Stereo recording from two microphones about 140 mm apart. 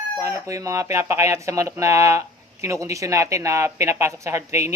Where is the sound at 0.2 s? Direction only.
20° right (ahead or behind).